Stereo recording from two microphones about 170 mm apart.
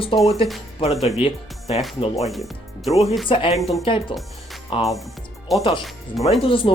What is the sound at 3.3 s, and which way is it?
Speech, 30° left (ahead or behind).